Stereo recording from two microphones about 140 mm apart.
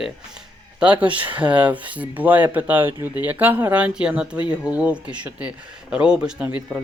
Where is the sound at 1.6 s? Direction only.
10° right (ahead or behind).